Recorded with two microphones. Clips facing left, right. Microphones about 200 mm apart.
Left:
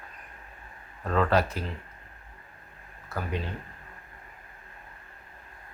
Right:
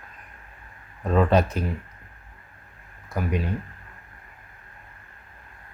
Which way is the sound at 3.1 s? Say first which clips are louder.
Right 6 dB; 15° right (ahead or behind).